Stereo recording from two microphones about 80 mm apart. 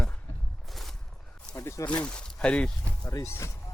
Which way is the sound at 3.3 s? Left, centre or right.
Left.